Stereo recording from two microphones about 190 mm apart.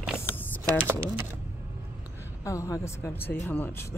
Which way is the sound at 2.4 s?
15° left (ahead or behind).